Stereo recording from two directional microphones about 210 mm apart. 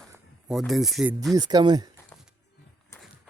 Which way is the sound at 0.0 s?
Centre (ahead or behind).